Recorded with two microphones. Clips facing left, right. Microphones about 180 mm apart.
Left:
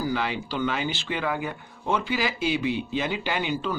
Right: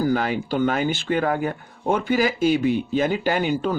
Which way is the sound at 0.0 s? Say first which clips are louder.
Right 6 dB; 45° right (ahead or behind).